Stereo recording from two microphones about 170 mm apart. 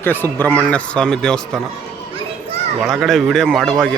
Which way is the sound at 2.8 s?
Centre (ahead or behind).